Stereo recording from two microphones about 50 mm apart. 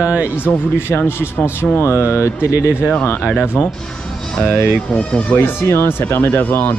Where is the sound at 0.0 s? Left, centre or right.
Right.